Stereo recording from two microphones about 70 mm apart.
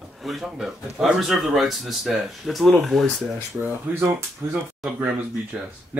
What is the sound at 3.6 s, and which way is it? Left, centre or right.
Speech, right.